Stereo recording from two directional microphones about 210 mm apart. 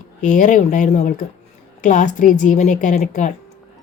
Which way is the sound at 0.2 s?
35° left (ahead or behind).